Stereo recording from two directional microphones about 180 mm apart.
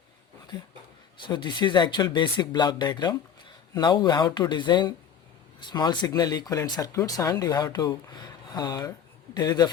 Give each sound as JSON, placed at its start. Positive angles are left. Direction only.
{"t": 1.2, "sound": "speech", "side_deg": 25}